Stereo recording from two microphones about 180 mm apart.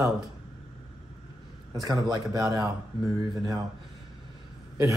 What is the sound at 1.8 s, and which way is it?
Speech, 20° right (ahead or behind).